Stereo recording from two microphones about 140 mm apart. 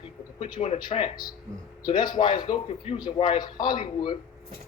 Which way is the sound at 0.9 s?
35° left (ahead or behind).